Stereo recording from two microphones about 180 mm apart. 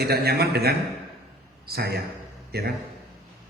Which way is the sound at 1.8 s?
60° right (ahead or behind).